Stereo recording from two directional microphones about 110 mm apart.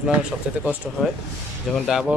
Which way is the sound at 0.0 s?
10° right (ahead or behind).